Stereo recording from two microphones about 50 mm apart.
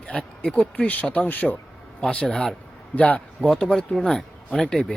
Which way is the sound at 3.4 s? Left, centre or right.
Centre.